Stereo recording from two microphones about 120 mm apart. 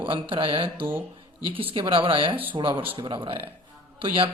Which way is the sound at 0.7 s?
15° right (ahead or behind).